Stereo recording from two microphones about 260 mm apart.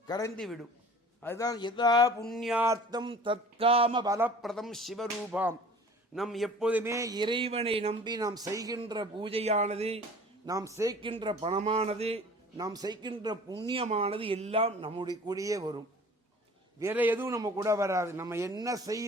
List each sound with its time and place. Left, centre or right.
0.3 s speech: centre
2.2 s a man's voice: centre
4.4 s a man's voice: centre; by 10.0 s right
10.4 s a man's voice: centre
16.8 s a man's voice: centre